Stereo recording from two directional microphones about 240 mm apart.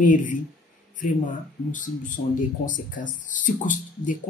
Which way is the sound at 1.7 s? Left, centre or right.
Left.